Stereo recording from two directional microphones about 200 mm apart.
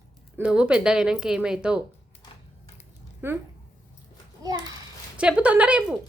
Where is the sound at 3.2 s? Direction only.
10° right (ahead or behind).